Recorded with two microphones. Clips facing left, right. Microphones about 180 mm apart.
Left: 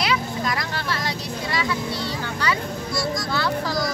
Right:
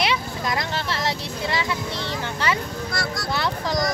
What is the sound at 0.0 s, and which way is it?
Vehicle, 25° right (ahead or behind).